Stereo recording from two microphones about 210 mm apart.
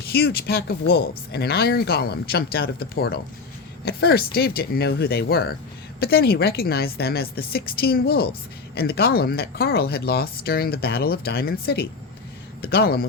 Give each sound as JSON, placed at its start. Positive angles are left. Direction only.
{"t": 0.0, "sound": "speech", "side_deg": 50}